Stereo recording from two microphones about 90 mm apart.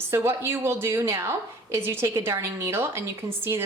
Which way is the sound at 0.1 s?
30° right (ahead or behind).